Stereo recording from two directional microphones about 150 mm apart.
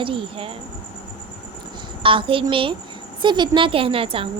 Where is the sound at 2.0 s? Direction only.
35° right (ahead or behind).